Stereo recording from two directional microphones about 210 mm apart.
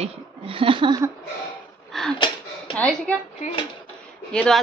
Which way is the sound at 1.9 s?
Centre (ahead or behind).